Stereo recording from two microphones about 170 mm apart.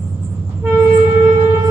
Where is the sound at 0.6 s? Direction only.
15° right (ahead or behind).